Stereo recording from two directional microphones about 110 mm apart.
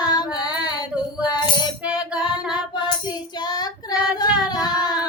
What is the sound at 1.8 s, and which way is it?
Music, 10° right (ahead or behind).